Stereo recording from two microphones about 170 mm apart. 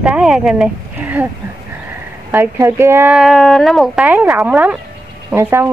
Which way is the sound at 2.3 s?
15° right (ahead or behind).